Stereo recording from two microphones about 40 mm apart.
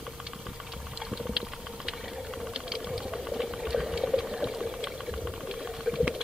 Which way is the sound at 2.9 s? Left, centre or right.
Centre.